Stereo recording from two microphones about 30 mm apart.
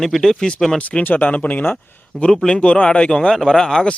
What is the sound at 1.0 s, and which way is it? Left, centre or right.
Speech, left.